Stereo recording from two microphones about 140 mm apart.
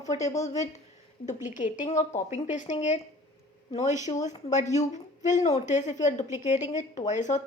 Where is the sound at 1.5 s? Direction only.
65° left (ahead or behind).